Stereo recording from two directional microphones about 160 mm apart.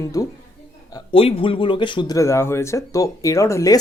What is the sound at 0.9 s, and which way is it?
Speech, 30° left (ahead or behind).